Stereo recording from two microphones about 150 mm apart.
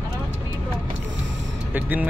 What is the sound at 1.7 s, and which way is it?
Speech, 10° right (ahead or behind).